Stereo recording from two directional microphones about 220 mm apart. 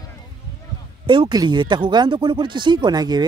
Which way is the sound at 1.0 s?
20° right (ahead or behind).